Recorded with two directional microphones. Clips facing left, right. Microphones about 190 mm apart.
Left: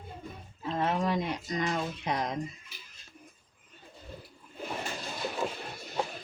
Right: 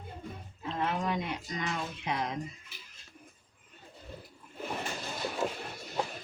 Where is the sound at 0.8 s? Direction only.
35° left (ahead or behind).